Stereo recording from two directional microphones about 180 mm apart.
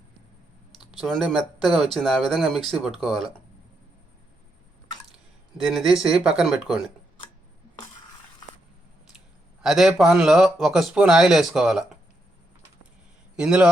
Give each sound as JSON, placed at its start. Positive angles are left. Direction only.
{"t": 0.8, "sound": "speech", "side_deg": 0}
{"t": 5.6, "sound": "speech", "side_deg": 0}
{"t": 9.6, "sound": "speech", "side_deg": 0}
{"t": 13.3, "sound": "speech", "side_deg": -5}